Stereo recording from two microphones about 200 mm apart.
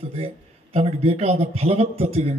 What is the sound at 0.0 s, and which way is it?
A man's voice, 30° right (ahead or behind).